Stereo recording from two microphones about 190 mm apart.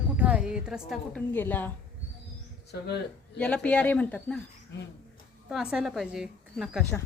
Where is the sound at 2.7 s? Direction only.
60° left (ahead or behind).